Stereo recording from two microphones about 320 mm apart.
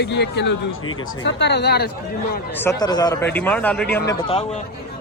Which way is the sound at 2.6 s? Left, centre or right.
Centre.